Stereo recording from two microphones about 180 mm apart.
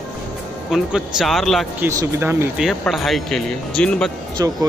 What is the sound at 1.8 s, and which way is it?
Speech, 10° right (ahead or behind).